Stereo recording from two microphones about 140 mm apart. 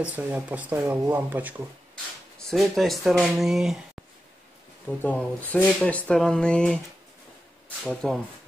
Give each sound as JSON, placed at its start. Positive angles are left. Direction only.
{"t": 0.0, "sound": "speech", "side_deg": -10}
{"t": 2.5, "sound": "speech", "side_deg": 0}
{"t": 4.8, "sound": "speech", "side_deg": 10}
{"t": 7.8, "sound": "speech", "side_deg": 5}